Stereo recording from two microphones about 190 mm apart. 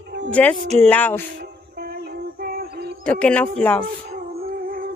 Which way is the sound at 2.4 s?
50° right (ahead or behind).